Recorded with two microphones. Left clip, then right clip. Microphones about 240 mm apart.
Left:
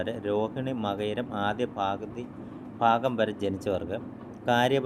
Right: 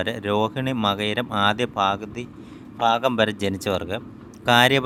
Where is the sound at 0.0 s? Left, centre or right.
Right.